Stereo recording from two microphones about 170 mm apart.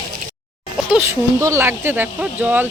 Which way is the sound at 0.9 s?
15° right (ahead or behind).